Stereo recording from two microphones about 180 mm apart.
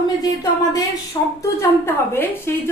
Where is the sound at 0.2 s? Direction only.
20° left (ahead or behind).